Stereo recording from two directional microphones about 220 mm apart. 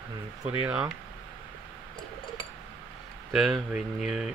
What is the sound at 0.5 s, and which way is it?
Speech, 5° right (ahead or behind).